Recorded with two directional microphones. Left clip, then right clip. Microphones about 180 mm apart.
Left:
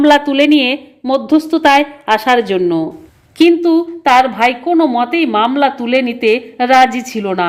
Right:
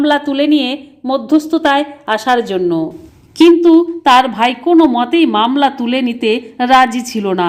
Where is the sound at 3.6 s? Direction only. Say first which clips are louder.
Right 3 dB; 5° right (ahead or behind).